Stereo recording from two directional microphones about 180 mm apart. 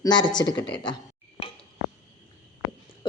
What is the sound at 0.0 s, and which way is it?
Speech, 25° left (ahead or behind).